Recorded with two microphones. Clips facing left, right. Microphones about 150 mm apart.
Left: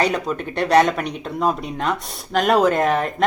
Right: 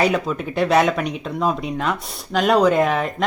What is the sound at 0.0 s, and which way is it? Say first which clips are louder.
A woman's voice: right 1 dB; 5° right (ahead or behind).